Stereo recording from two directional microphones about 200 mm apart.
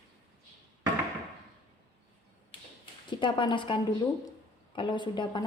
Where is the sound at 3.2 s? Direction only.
25° left (ahead or behind).